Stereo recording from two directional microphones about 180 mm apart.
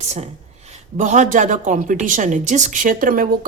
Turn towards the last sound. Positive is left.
turn(degrees=-50)  # may be behind; listen again after turning